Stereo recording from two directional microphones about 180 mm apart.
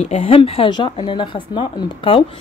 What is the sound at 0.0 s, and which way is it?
Speech, 35° left (ahead or behind).